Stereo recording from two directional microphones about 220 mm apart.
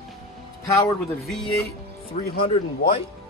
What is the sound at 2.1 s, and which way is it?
Speech, 30° left (ahead or behind).